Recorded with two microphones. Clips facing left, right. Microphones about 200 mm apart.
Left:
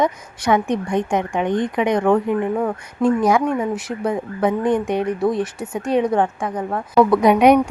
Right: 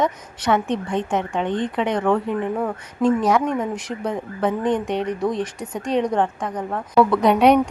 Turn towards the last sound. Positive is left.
turn(degrees=10)  # may be behind; listen again after turning